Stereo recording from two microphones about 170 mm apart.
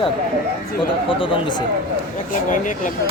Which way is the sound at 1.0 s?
30° left (ahead or behind).